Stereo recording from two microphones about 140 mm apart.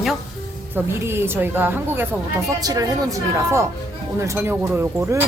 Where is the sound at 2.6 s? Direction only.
25° right (ahead or behind).